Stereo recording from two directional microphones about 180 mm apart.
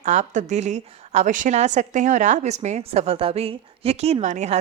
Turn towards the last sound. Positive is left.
turn(degrees=-40)  # may be behind; listen again after turning